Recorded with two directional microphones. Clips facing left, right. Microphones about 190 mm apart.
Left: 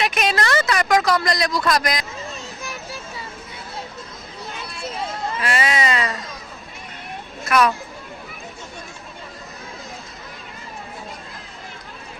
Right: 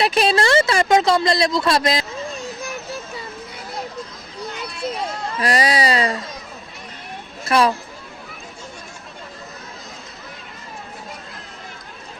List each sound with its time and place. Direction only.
0.0 s speech: 30° right (ahead or behind)
5.4 s speech: 35° right (ahead or behind)
7.4 s speech: 30° right (ahead or behind)